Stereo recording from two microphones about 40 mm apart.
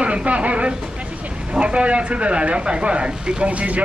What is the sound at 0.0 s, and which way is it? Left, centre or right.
Speech, right.